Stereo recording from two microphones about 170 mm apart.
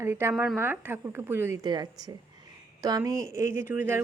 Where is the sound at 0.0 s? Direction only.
15° right (ahead or behind).